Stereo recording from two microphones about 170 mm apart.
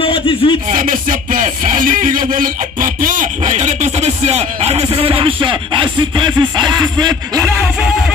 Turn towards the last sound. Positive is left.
turn(degrees=-5)  # may be behind; listen again after turning